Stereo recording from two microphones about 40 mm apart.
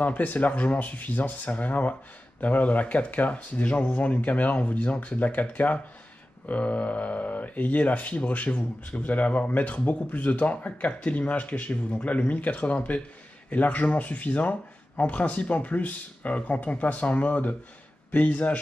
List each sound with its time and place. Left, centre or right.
0.0 s speech: left